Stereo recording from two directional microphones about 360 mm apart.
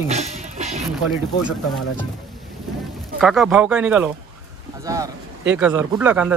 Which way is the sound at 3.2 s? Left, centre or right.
Centre.